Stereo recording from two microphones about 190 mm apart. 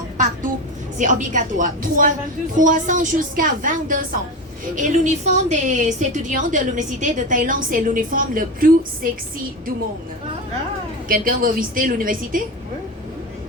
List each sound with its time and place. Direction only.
0.9 s a woman's voice: 40° right (ahead or behind)
11.1 s a woman's voice: 45° right (ahead or behind)